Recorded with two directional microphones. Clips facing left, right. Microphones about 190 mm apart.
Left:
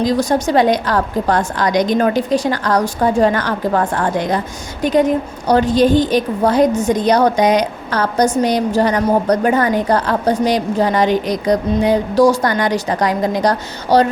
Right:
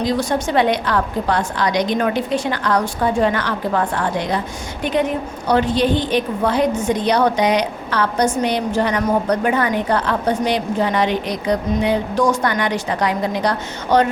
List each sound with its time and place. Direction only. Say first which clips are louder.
0.0 s a woman's voice: left 4 dB; 40° left (ahead or behind)